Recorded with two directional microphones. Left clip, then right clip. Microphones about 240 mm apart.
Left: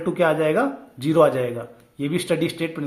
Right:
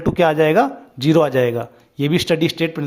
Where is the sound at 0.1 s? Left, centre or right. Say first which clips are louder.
Right 5 dB; right.